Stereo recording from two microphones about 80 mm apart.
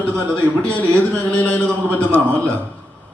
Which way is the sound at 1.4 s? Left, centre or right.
Centre.